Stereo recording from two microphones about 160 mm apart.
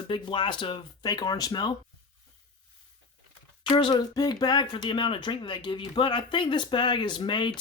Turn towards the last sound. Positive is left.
turn(degrees=30)  # may be behind; listen again after turning